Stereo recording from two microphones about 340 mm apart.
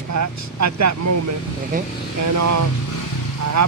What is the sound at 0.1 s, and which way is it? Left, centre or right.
Speech, right.